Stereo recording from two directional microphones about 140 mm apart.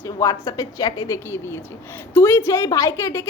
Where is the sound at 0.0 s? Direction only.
20° left (ahead or behind).